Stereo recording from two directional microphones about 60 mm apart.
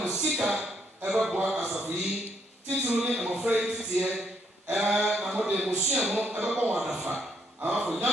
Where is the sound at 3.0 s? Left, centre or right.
Centre.